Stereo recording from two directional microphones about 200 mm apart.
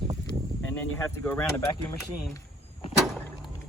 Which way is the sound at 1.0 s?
10° left (ahead or behind).